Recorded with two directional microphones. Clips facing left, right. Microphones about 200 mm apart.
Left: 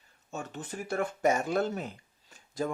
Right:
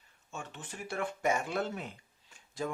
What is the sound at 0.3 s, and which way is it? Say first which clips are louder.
Speech: left 6 dB; 40° left (ahead or behind).